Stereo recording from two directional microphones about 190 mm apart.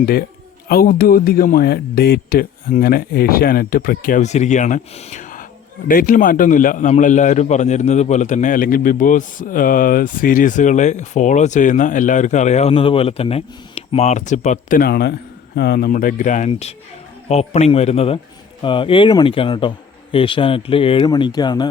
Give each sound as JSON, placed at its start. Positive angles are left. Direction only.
{"t": 0.0, "sound": "a man's voice", "side_deg": 50}